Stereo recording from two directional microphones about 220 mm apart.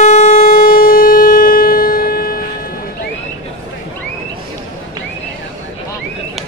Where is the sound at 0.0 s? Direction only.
30° left (ahead or behind).